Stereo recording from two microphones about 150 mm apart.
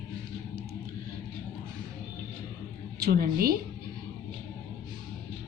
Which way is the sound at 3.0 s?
85° right.